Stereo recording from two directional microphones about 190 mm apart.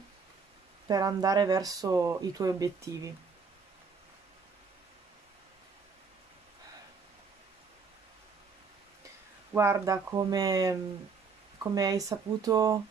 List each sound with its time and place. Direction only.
0.8 s speech: 20° right (ahead or behind)
9.5 s speech: 15° right (ahead or behind)